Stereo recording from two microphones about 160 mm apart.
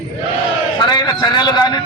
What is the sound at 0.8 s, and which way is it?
A man's voice, 25° left (ahead or behind).